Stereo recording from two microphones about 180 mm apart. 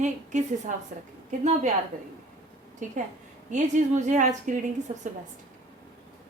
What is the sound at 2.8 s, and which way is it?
A woman's voice, 45° right (ahead or behind).